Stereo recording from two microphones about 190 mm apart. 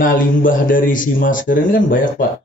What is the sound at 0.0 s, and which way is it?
Speech, 45° left (ahead or behind).